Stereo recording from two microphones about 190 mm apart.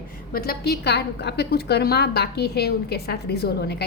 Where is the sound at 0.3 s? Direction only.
55° left (ahead or behind).